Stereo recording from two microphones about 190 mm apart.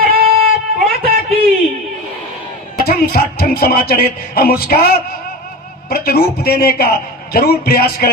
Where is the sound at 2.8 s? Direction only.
55° left (ahead or behind).